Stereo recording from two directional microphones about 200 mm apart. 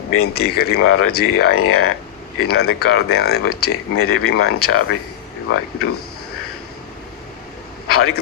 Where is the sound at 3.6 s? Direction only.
90° left.